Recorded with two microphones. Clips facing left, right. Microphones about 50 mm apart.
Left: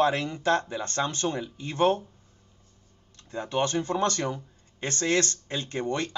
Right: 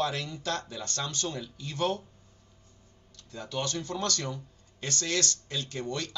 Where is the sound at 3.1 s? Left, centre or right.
Left.